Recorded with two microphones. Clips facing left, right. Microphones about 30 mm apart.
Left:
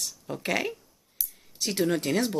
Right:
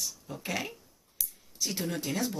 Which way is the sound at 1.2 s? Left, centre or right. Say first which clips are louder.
Left 1 dB; left.